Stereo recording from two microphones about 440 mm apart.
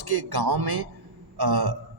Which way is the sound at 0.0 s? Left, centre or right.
Right.